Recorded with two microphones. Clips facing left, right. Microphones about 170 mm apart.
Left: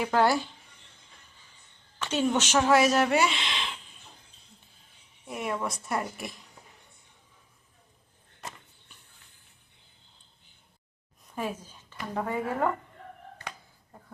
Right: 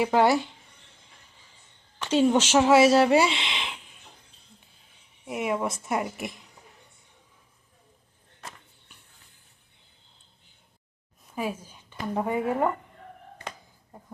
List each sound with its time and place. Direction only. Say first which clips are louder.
0.0 s a woman's voice: right 3 dB; 20° right (ahead or behind)
2.0 s a woman's voice: right 5 dB; 30° right (ahead or behind)
5.2 s a woman's voice: right 4 dB; 15° right (ahead or behind)
11.3 s a woman's voice: right 2 dB; 10° right (ahead or behind)